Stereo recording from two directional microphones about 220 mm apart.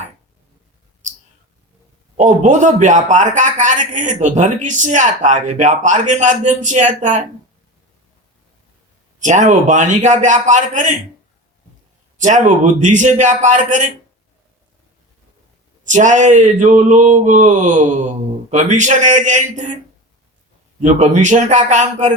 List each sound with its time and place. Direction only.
2.1 s a man's voice: 35° right (ahead or behind)
9.1 s a man's voice: 35° right (ahead or behind)
12.2 s a man's voice: 35° right (ahead or behind)
15.8 s a man's voice: 35° right (ahead or behind)
20.8 s a man's voice: 35° right (ahead or behind)